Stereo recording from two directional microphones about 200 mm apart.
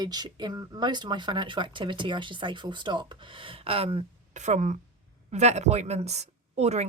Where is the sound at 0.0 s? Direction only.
20° right (ahead or behind).